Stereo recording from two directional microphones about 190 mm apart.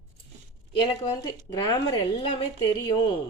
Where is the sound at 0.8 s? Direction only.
25° left (ahead or behind).